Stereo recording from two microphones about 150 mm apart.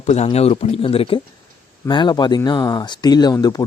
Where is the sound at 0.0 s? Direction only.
45° left (ahead or behind).